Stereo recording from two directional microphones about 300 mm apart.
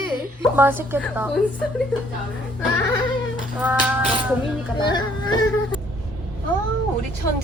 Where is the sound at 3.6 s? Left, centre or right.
Centre.